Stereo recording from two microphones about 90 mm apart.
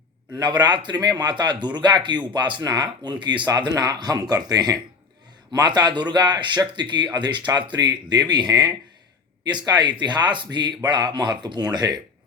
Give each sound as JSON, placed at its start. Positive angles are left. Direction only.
{"t": 0.6, "sound": "speech", "side_deg": -55}